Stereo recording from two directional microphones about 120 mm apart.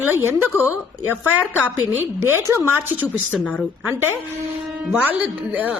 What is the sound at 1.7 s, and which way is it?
Speech, 20° right (ahead or behind).